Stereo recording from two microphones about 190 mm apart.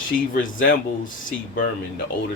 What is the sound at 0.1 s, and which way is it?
Speech, 45° left (ahead or behind).